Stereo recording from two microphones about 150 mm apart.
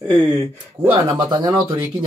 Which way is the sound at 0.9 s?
30° right (ahead or behind).